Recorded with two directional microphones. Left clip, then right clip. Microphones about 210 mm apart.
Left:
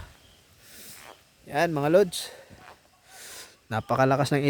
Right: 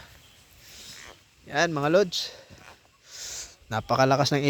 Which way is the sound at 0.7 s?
20° left (ahead or behind).